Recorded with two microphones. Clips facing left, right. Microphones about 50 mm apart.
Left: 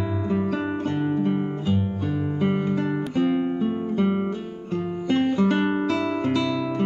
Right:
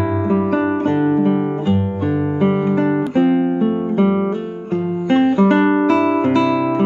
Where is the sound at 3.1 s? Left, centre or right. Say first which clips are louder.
Right 7 dB; right.